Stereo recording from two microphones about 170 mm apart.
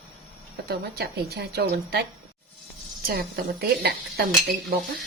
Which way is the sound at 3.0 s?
65° right (ahead or behind).